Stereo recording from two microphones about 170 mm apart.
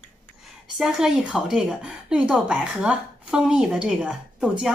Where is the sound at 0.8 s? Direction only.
5° right (ahead or behind).